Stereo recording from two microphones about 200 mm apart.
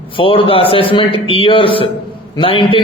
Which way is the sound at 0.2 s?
25° left (ahead or behind).